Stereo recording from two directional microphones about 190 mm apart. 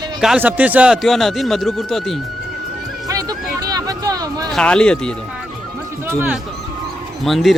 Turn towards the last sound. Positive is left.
turn(degrees=0)  # may be behind; listen again after turning